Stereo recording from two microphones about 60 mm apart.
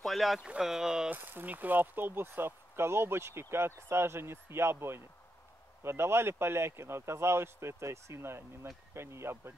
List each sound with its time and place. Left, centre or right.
0.0 s speech: centre
1.1 s speech: right